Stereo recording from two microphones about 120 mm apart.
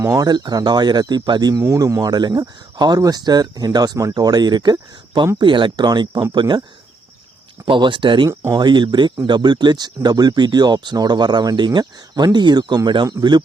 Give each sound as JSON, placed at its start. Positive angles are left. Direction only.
{"t": 0.0, "sound": "speech", "side_deg": -30}
{"t": 7.6, "sound": "speech", "side_deg": -40}
{"t": 8.3, "sound": "speech", "side_deg": -20}
{"t": 8.5, "sound": "speech", "side_deg": -40}